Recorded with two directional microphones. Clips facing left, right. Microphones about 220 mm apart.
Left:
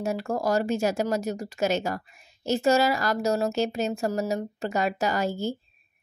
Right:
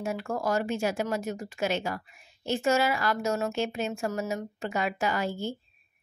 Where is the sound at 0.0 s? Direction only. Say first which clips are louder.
Left 3 dB; 40° left (ahead or behind).